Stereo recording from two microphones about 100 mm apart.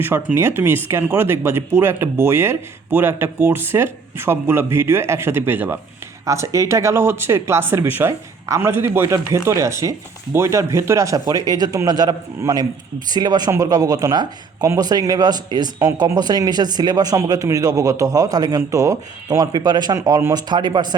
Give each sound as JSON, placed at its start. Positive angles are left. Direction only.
{"t": 0.0, "sound": "a man's voice", "side_deg": -20}
{"t": 19.5, "sound": "a man's voice", "side_deg": -45}